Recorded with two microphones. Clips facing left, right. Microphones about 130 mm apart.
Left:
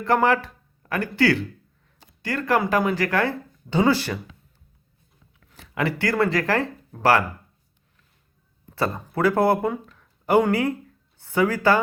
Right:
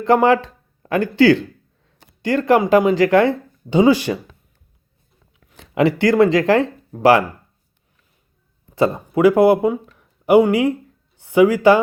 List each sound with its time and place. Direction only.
0.0 s speech: 20° right (ahead or behind)
5.7 s speech: 20° right (ahead or behind)
8.7 s speech: 15° right (ahead or behind)